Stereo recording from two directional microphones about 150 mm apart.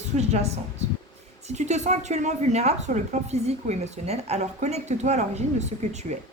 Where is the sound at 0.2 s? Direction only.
45° right (ahead or behind).